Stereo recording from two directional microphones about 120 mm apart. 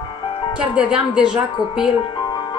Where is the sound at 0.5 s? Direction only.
10° right (ahead or behind).